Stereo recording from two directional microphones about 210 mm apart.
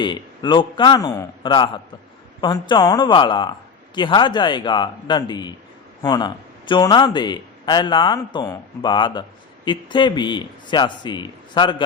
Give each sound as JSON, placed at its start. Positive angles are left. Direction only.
{"t": 0.0, "sound": "a man's voice", "side_deg": 20}